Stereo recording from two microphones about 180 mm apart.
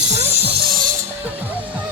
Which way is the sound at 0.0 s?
70° right (ahead or behind).